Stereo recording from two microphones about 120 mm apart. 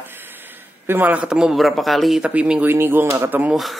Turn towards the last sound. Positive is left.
turn(degrees=0)  # may be behind; listen again after turning